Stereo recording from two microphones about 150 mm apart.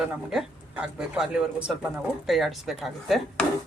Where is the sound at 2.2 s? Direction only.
Centre (ahead or behind).